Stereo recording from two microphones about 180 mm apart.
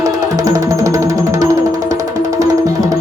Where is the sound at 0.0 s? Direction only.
20° right (ahead or behind).